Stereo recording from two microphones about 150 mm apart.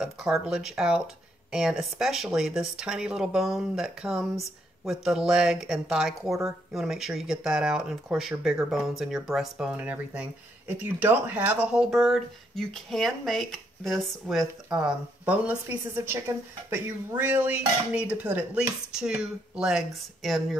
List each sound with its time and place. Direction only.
0.0 s speech: 5° right (ahead or behind)
16.1 s dishes: 15° right (ahead or behind); by 20.4 s centre (ahead or behind)